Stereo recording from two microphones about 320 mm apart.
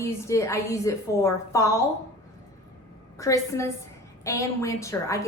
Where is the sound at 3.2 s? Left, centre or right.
Centre.